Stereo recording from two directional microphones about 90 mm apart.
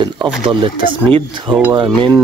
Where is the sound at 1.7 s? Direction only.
65° right (ahead or behind).